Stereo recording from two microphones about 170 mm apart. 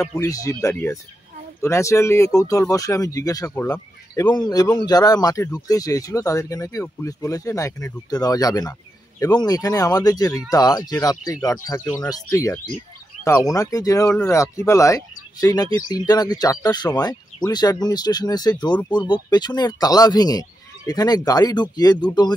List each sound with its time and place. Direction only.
0.1 s speech: 20° left (ahead or behind)